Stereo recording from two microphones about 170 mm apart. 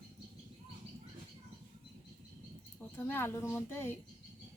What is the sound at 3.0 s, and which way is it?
Speech, 15° left (ahead or behind).